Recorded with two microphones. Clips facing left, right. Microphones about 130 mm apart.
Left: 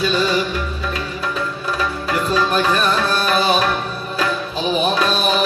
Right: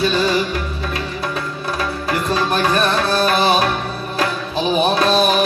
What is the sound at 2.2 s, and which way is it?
Music, 40° right (ahead or behind).